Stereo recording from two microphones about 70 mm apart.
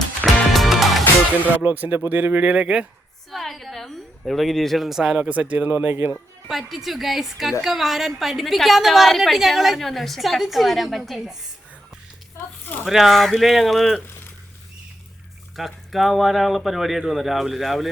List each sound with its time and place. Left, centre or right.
0.5 s music: centre
1.6 s speech: right
3.3 s a woman's voice: centre
5.1 s speech: centre
6.5 s a woman's voice: centre
12.8 s a woman's voice: centre
15.5 s a woman's voice: centre